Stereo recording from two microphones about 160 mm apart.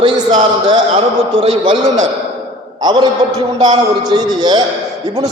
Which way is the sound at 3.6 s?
25° right (ahead or behind).